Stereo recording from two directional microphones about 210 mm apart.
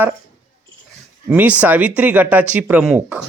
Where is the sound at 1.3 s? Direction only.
5° right (ahead or behind).